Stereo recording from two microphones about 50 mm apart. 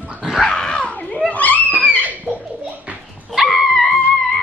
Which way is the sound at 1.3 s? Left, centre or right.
Left.